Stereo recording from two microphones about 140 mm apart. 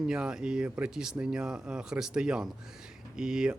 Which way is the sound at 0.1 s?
5° right (ahead or behind).